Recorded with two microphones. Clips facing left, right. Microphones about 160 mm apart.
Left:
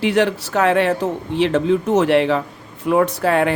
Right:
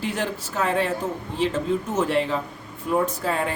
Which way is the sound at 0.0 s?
75° left (ahead or behind).